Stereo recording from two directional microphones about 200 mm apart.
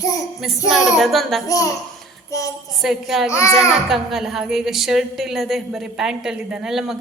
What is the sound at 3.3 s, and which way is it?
Speech, 15° left (ahead or behind).